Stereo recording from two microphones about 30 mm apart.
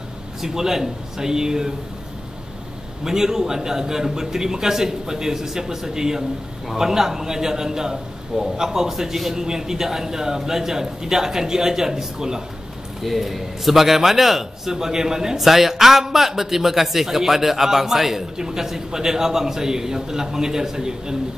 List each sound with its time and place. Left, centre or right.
0.4 s a man's voice: centre
3.0 s a man's voice: centre
13.0 s a man's voice: centre